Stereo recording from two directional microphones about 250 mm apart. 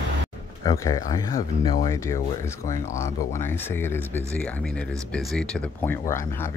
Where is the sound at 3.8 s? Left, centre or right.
Centre.